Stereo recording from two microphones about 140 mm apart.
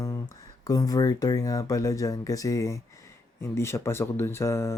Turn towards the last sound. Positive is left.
turn(degrees=20)  # may be behind; listen again after turning